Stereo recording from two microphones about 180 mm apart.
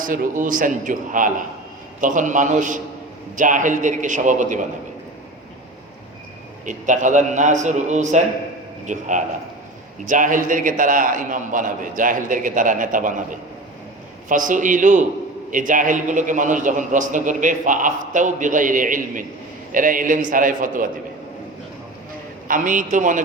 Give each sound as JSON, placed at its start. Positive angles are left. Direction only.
{"t": 0.0, "sound": "a man's voice", "side_deg": -50}
{"t": 6.7, "sound": "a man's voice", "side_deg": -45}
{"t": 22.4, "sound": "a man's voice", "side_deg": -45}